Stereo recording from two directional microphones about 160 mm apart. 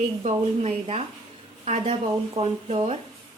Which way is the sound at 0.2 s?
40° right (ahead or behind).